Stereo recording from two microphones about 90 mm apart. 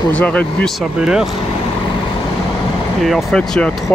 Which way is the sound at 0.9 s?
10° right (ahead or behind).